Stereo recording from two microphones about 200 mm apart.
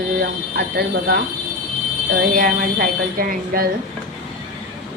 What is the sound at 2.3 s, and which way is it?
Speech, 45° right (ahead or behind).